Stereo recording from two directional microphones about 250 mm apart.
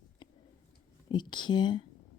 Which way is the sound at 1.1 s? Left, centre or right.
Centre.